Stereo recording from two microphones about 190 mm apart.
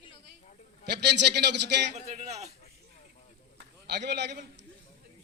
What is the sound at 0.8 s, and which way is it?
A man's voice, 60° right (ahead or behind).